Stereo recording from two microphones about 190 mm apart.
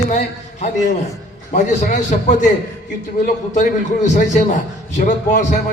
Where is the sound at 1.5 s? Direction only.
40° left (ahead or behind).